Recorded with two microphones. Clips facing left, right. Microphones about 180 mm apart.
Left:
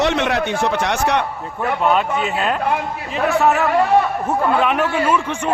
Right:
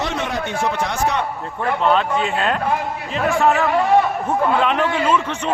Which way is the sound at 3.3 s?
Centre (ahead or behind).